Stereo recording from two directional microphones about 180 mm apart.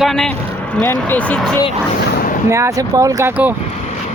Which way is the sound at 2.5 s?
15° right (ahead or behind).